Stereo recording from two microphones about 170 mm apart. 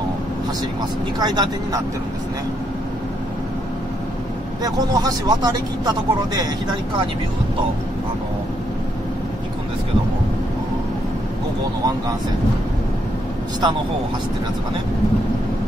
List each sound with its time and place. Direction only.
1.2 s speech: 25° right (ahead or behind)
4.6 s speech: 20° right (ahead or behind)